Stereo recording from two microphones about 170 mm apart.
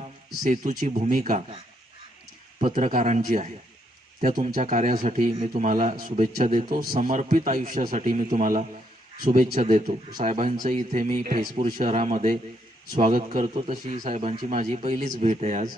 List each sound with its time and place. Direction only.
0.4 s a man's voice: 50° right (ahead or behind)
2.6 s a man's voice: 50° right (ahead or behind)